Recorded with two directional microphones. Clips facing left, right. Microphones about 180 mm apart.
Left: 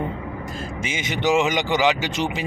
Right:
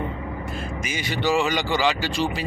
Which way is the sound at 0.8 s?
25° left (ahead or behind).